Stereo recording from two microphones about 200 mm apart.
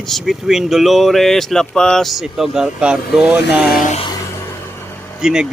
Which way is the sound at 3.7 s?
45° left (ahead or behind).